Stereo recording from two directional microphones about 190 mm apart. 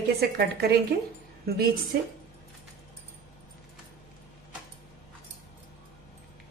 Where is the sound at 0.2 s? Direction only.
55° right (ahead or behind).